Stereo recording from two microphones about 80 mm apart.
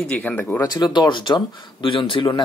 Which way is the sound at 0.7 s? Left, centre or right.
Left.